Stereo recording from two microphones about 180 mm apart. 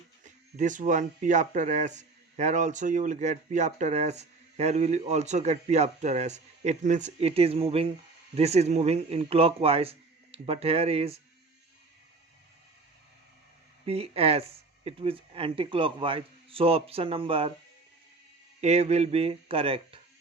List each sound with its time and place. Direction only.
0.5 s speech: 45° right (ahead or behind)
13.8 s speech: 35° right (ahead or behind)
18.6 s speech: 35° right (ahead or behind)